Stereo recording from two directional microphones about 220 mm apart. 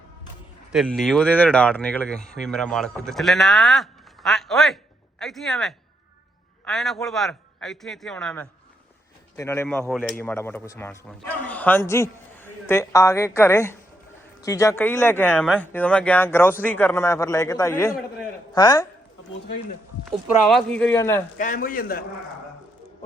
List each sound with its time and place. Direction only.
0.7 s a man's voice: centre (ahead or behind); by 18.9 s 15° left (ahead or behind)
20.1 s a man's voice: centre (ahead or behind)
21.3 s a man's voice: 35° left (ahead or behind)